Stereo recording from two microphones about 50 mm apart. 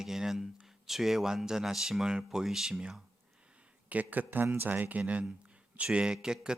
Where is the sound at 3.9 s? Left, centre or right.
Right.